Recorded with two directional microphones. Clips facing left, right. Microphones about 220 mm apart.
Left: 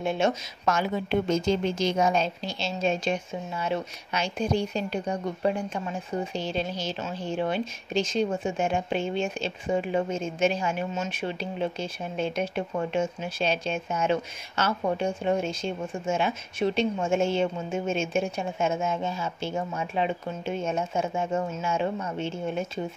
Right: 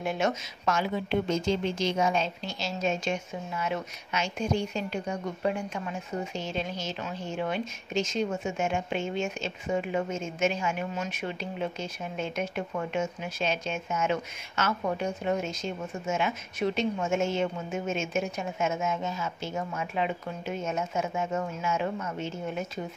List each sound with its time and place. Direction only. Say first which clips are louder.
0.0 s speech: left 3 dB; 25° left (ahead or behind)
0.7 s a woman's voice: left 2 dB; 45° left (ahead or behind)